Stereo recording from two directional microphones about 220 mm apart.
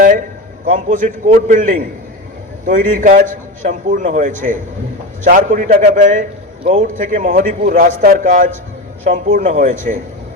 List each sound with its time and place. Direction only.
0.6 s a man's voice: 35° right (ahead or behind)